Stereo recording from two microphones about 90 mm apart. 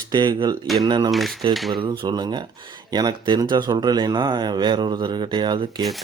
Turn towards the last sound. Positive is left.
turn(degrees=-55)  # may be behind; listen again after turning